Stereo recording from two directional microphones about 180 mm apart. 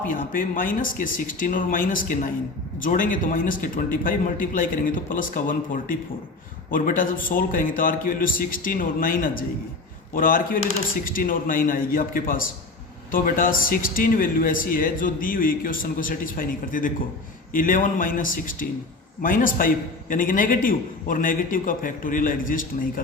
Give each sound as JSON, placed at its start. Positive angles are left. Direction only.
{"t": 0.1, "sound": "a man's voice", "side_deg": 50}